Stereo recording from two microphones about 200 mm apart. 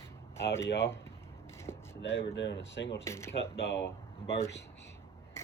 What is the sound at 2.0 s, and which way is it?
Speech, 60° left (ahead or behind).